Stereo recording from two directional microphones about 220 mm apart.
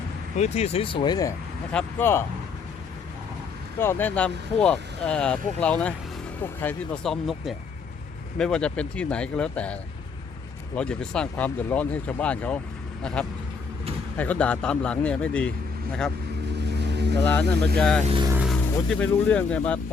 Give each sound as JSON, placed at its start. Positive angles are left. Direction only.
{"t": 0.3, "sound": "a man's voice", "side_deg": 30}
{"t": 3.8, "sound": "speech", "side_deg": 10}
{"t": 10.8, "sound": "speech", "side_deg": 5}
{"t": 16.6, "sound": "vehicle", "side_deg": -50}
{"t": 17.7, "sound": "speech", "side_deg": 5}
{"t": 18.0, "sound": "speech", "side_deg": -25}
{"t": 18.3, "sound": "vehicle", "side_deg": -5}
{"t": 18.9, "sound": "speech", "side_deg": 5}